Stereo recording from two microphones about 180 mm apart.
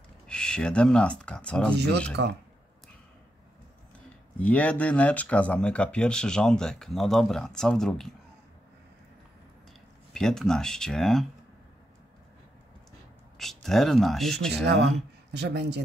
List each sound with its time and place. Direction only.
0.3 s speech: 5° left (ahead or behind)
2.2 s speech: 75° right (ahead or behind)
4.4 s speech: 5° left (ahead or behind)
10.1 s speech: 5° left (ahead or behind)
13.4 s speech: centre (ahead or behind)
15.3 s speech: 70° right (ahead or behind)